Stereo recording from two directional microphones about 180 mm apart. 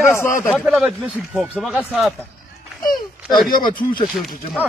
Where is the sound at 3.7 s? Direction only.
50° left (ahead or behind).